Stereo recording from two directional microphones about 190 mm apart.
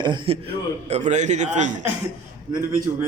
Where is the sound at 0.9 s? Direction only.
35° right (ahead or behind).